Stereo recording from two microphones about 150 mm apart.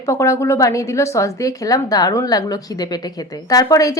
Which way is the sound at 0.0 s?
20° left (ahead or behind).